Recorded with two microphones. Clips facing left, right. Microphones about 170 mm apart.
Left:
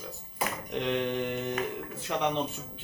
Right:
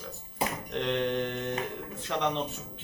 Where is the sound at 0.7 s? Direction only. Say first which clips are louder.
Even; 10° left (ahead or behind).